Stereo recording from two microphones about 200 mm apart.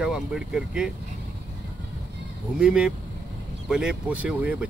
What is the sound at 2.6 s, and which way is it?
Speech, 5° right (ahead or behind).